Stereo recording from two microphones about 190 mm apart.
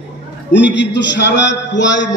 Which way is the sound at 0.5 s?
65° left (ahead or behind).